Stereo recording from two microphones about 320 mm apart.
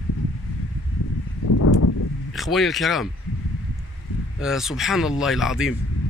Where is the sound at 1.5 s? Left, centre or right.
Left.